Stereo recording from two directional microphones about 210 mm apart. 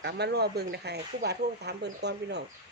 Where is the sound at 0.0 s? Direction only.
50° right (ahead or behind).